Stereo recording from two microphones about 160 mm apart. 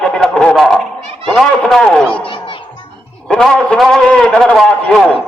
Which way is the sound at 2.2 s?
30° left (ahead or behind).